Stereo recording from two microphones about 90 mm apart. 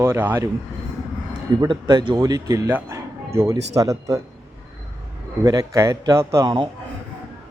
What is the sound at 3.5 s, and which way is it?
Speech, 40° right (ahead or behind).